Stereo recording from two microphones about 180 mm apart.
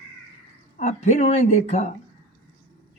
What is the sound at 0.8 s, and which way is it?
Speech, 40° left (ahead or behind).